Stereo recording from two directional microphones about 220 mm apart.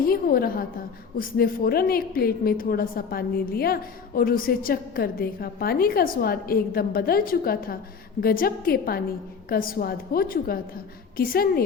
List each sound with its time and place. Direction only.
0.0 s a woman's voice: 40° left (ahead or behind)